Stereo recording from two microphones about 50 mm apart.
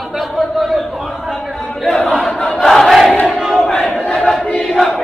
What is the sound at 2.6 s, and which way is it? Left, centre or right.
Crowd, centre.